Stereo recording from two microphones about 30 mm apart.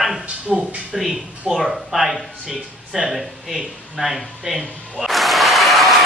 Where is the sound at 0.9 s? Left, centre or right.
Centre.